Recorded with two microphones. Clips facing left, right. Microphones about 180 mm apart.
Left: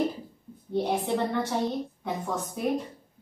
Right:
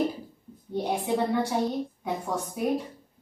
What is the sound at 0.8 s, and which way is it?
A woman's voice, 10° right (ahead or behind).